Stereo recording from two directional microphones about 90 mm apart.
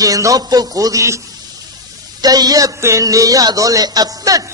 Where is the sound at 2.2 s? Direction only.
45° right (ahead or behind).